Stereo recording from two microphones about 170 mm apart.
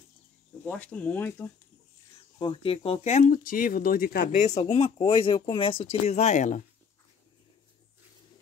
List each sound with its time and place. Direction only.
0.7 s speech: 10° left (ahead or behind)
2.3 s speech: 30° left (ahead or behind); by 4.5 s 55° left (ahead or behind)
4.5 s speech: 40° left (ahead or behind)